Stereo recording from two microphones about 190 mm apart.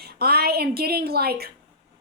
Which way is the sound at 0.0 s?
55° right (ahead or behind).